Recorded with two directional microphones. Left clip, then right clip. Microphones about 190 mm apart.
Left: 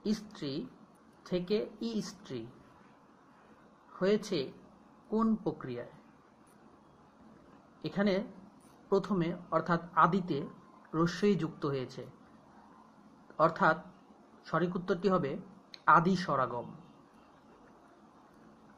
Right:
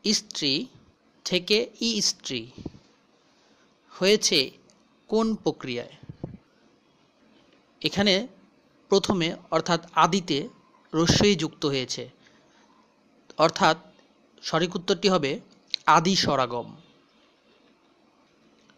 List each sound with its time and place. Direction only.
0.0 s a woman's voice: 45° right (ahead or behind)
4.0 s a woman's voice: 45° right (ahead or behind)
7.8 s a woman's voice: 45° right (ahead or behind)
13.4 s a woman's voice: 45° right (ahead or behind)